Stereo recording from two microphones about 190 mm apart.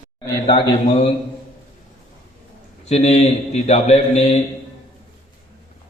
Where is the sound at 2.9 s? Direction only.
35° left (ahead or behind).